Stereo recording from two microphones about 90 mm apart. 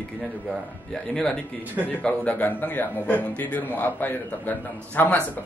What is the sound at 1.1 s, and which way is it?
A man's voice, 5° left (ahead or behind).